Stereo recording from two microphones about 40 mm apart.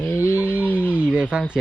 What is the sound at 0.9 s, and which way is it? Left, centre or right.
Speech, right.